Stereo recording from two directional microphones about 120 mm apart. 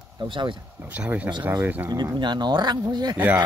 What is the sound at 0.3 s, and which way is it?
Speech, 45° right (ahead or behind).